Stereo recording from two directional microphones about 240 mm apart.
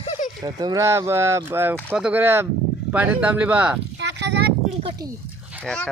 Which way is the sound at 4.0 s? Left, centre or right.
Right.